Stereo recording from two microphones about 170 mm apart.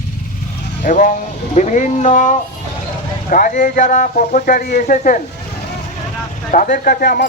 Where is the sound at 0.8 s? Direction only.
50° left (ahead or behind).